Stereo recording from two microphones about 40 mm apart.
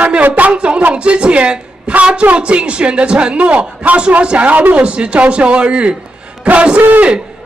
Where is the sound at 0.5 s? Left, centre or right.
Right.